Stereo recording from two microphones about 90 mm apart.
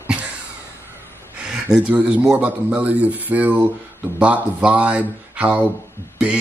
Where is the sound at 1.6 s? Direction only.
15° right (ahead or behind).